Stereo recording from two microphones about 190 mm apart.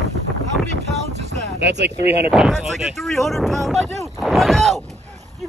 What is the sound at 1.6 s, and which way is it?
Speech, 65° right (ahead or behind).